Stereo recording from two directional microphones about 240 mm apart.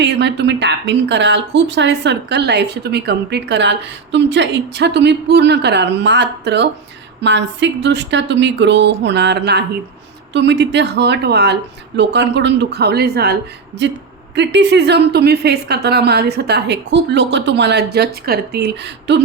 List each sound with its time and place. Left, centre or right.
0.0 s a woman's voice: right